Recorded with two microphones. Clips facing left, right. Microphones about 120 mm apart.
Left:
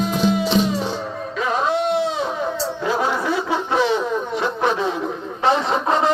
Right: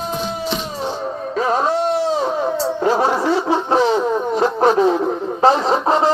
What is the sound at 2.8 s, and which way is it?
Snicker, 40° right (ahead or behind).